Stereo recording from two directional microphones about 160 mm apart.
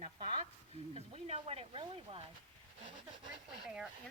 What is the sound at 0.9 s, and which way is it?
Speech, 40° right (ahead or behind).